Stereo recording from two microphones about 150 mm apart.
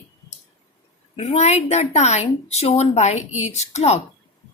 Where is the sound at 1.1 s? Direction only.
40° left (ahead or behind).